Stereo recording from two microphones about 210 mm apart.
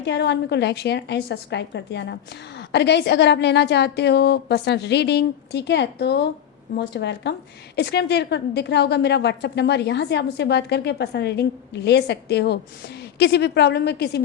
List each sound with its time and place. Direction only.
0.0 s a woman's voice: 55° left (ahead or behind)